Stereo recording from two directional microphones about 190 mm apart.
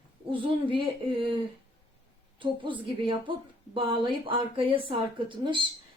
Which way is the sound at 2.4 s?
25° right (ahead or behind).